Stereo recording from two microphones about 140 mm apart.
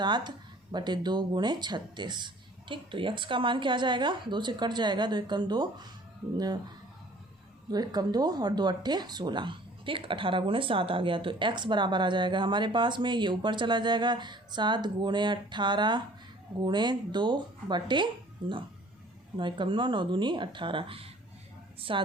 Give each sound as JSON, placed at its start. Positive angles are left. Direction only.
{"t": 0.0, "sound": "speech", "side_deg": -30}
{"t": 7.7, "sound": "a woman's voice", "side_deg": -30}